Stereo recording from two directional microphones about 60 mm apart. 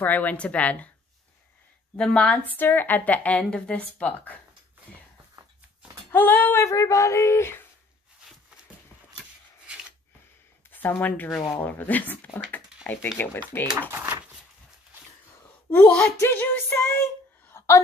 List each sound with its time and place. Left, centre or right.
0.0 s a woman's voice: left
2.0 s a woman's voice: centre
2.5 s a woman's voice: left
6.1 s music: left
6.6 s speech: left
10.7 s a woman's voice: left
13.2 s music: left
13.7 s speech: right
15.8 s a woman's voice: centre
16.2 s music: left
17.6 s a sound: left